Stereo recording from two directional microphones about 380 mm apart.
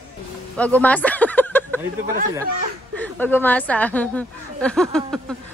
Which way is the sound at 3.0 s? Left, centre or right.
Centre.